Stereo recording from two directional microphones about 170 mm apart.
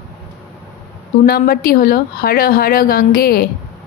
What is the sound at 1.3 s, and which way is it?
A woman's voice, 60° left (ahead or behind).